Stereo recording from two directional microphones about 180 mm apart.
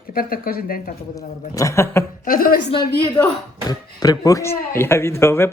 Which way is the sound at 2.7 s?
25° left (ahead or behind).